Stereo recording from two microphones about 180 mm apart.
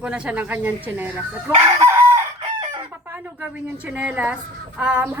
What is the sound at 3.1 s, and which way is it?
A woman's voice, 10° right (ahead or behind).